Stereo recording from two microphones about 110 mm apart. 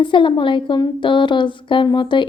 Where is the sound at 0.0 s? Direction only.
45° left (ahead or behind).